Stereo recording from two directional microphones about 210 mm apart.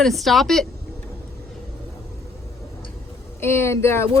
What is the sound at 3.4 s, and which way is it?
Speech, 10° left (ahead or behind).